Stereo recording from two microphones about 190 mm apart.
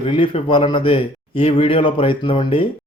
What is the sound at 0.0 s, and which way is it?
Speech, 30° left (ahead or behind).